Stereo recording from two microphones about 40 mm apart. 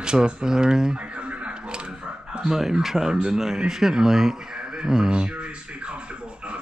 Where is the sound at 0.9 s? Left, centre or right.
Right.